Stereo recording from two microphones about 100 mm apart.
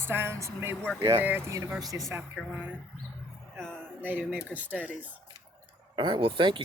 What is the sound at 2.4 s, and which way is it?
Speech, 5° left (ahead or behind).